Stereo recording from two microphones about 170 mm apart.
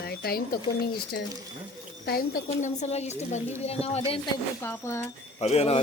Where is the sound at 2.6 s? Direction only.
40° left (ahead or behind).